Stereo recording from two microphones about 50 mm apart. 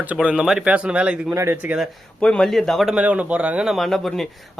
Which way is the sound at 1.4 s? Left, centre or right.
Right.